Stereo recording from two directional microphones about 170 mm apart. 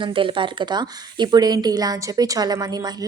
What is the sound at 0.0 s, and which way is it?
A woman's voice, 30° right (ahead or behind).